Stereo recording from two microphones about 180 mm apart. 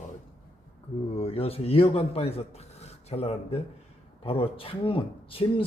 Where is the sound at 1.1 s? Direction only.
30° left (ahead or behind).